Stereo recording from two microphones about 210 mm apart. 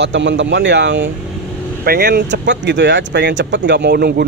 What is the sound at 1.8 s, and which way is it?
Speech, 50° right (ahead or behind).